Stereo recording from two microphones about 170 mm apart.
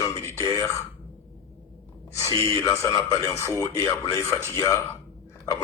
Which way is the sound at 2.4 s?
20° left (ahead or behind).